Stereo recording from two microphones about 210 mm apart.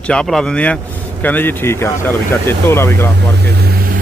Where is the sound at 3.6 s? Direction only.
45° right (ahead or behind).